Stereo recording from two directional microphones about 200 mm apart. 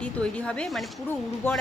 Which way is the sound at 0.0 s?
5° left (ahead or behind).